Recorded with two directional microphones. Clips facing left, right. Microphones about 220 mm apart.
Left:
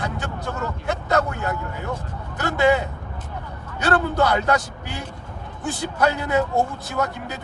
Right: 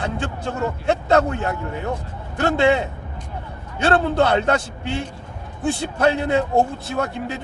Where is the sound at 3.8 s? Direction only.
25° right (ahead or behind).